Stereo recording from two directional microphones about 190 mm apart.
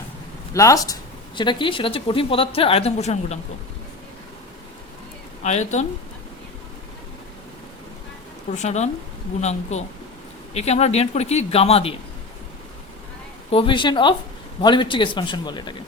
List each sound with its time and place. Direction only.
0.5 s a woman's voice: 15° left (ahead or behind); by 3.3 s 35° left (ahead or behind)
5.4 s speech: 35° left (ahead or behind)
8.5 s speech: 35° left (ahead or behind)
13.5 s a woman's voice: 25° left (ahead or behind)